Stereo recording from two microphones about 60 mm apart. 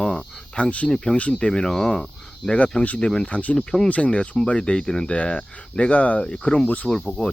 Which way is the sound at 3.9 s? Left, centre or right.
Left.